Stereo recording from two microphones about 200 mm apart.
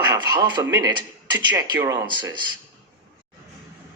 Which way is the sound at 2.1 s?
20° right (ahead or behind).